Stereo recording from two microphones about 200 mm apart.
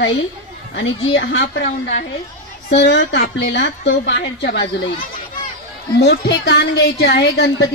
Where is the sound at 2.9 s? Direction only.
60° left (ahead or behind).